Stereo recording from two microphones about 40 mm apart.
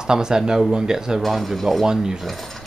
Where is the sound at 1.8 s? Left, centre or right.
Centre.